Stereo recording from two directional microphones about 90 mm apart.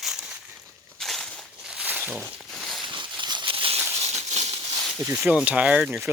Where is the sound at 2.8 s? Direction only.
60° right (ahead or behind); by 3.8 s 85° right.